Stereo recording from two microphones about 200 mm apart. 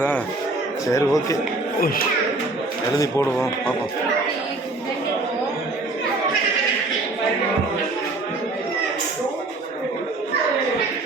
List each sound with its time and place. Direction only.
0.9 s speech: 15° left (ahead or behind)